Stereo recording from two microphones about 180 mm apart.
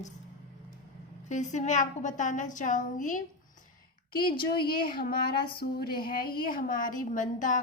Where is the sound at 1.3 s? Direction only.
40° left (ahead or behind).